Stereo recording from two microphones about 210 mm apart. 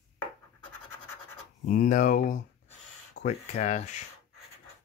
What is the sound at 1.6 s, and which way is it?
Speech, 40° left (ahead or behind).